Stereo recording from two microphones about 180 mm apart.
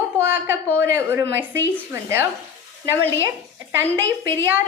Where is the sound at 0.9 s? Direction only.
15° right (ahead or behind).